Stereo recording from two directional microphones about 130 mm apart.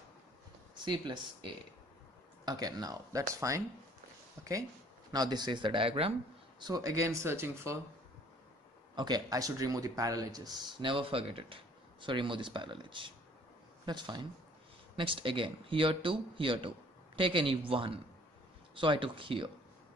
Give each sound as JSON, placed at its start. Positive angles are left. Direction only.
{"t": 0.7, "sound": "speech", "side_deg": -35}
{"t": 5.1, "sound": "speech", "side_deg": -30}
{"t": 6.6, "sound": "speech", "side_deg": -30}
{"t": 8.9, "sound": "speech", "side_deg": -35}